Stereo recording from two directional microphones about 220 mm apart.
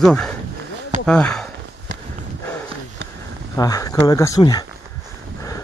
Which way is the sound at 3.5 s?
15° left (ahead or behind).